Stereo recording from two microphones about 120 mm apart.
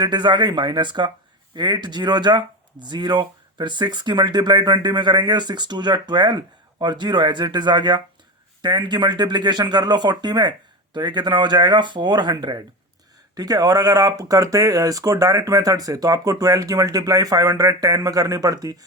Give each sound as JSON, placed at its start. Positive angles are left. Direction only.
{"t": 0.0, "sound": "speech", "side_deg": -35}